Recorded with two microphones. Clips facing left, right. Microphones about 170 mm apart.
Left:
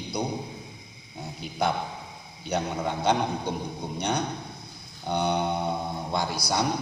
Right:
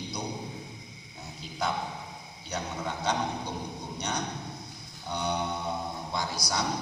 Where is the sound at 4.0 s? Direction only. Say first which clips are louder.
Left 6 dB; 60° left (ahead or behind).